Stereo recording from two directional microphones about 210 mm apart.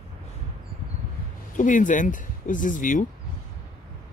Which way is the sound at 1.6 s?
40° left (ahead or behind).